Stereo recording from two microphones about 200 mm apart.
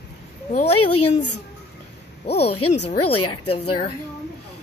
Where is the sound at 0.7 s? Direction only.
90° left.